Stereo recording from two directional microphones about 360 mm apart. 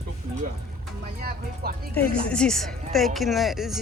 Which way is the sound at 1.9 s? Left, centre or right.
Centre.